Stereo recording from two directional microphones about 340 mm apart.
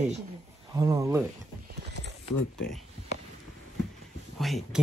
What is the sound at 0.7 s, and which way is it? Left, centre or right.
Speech, centre.